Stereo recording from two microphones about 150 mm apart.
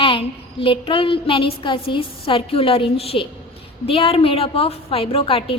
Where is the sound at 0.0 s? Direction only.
35° left (ahead or behind).